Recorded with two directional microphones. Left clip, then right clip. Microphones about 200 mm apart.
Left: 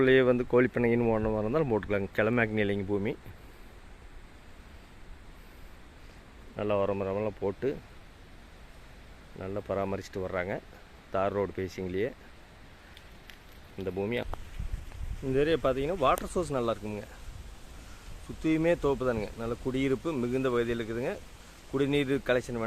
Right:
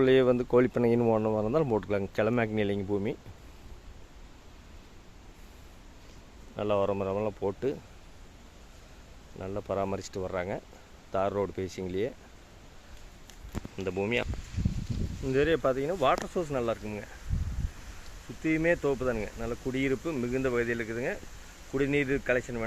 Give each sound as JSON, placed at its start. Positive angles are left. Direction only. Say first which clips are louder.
{"t": 0.0, "sound": "speech", "louder": "even", "side_deg": -5}
{"t": 6.6, "sound": "speech", "louder": "right 1 dB", "side_deg": -5}
{"t": 9.4, "sound": "speech", "louder": "right 1 dB", "side_deg": 0}
{"t": 13.8, "sound": "speech", "louder": "right 2 dB", "side_deg": -5}
{"t": 15.3, "sound": "speech", "louder": "right 1 dB", "side_deg": 0}
{"t": 18.4, "sound": "speech", "louder": "even", "side_deg": 20}